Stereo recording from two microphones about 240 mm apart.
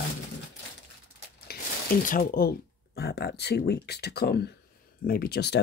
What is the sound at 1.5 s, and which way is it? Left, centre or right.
Speech, left.